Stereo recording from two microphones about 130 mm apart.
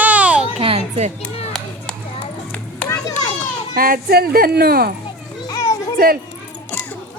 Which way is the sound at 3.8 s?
90° right.